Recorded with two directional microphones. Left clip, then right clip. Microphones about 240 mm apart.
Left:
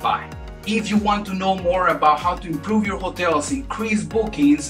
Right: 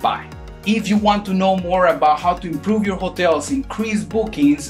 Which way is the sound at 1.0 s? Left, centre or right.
Right.